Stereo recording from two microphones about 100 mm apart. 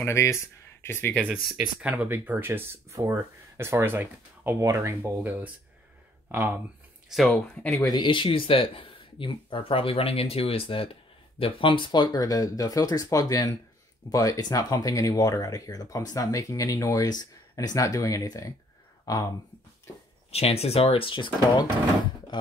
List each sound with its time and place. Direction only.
0.0 s speech: 30° left (ahead or behind)
1.5 s speech: 10° right (ahead or behind)
4.6 s speech: 30° right (ahead or behind)
7.1 s speech: centre (ahead or behind)
7.3 s speech: 20° left (ahead or behind)
7.8 s speech: 50° left (ahead or behind)
20.2 s speech: 90° left; by 21.6 s 55° left (ahead or behind)